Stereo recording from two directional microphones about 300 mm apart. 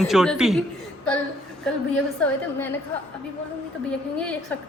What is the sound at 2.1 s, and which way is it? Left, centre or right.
Speech, centre.